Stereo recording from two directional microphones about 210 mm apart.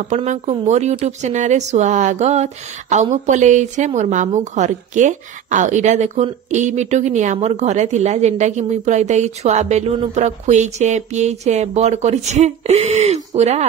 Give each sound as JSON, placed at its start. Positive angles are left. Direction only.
{"t": 0.1, "sound": "speech", "side_deg": -35}